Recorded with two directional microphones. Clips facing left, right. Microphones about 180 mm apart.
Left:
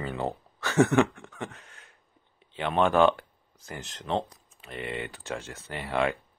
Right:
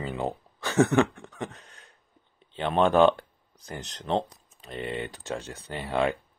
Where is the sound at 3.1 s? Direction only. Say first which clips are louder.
Right 2 dB; 35° right (ahead or behind).